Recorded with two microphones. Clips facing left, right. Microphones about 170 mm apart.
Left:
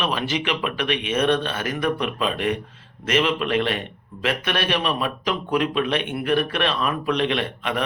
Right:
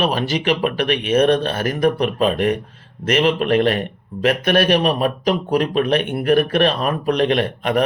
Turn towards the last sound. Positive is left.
turn(degrees=-40)  # may be behind; listen again after turning